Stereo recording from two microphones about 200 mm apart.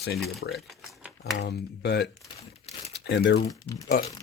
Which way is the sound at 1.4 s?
55° left (ahead or behind).